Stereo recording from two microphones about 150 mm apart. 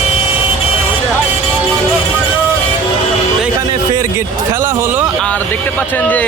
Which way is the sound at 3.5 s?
25° right (ahead or behind).